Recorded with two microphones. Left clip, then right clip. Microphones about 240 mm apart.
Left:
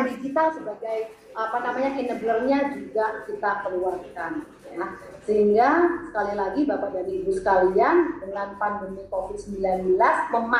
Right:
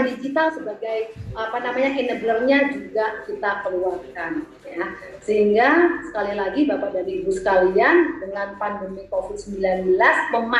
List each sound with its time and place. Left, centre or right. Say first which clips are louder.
0.0 s a woman's voice: right 2 dB; right
1.8 s a woman's voice: right 4 dB; right